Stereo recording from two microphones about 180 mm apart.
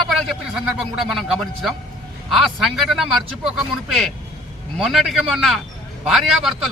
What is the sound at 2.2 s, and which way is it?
A man's voice, centre (ahead or behind).